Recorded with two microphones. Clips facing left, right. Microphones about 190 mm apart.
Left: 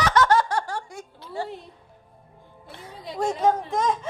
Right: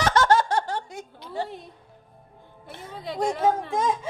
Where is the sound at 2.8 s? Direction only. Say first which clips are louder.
Right 4 dB; 60° right (ahead or behind).